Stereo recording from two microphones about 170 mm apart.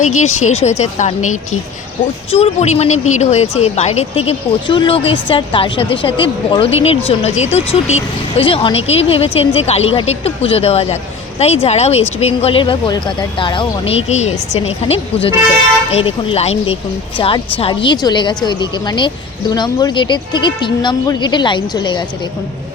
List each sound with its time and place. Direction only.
0.0 s a woman's voice: 45° left (ahead or behind); by 22.0 s 25° left (ahead or behind)